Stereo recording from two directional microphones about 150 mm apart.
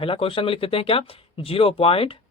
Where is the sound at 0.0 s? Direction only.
35° left (ahead or behind).